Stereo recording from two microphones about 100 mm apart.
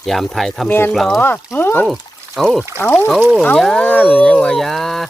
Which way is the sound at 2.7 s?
20° left (ahead or behind).